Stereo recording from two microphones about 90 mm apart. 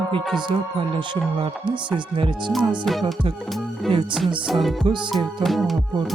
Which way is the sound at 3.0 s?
65° right (ahead or behind).